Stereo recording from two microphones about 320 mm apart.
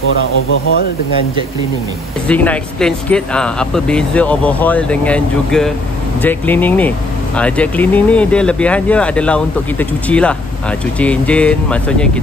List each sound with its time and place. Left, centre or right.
0.1 s speech: left
2.2 s speech: centre